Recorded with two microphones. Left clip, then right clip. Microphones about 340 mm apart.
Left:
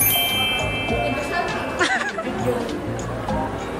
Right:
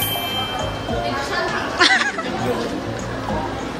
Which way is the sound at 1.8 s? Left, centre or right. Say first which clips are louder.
Right 6 dB; centre.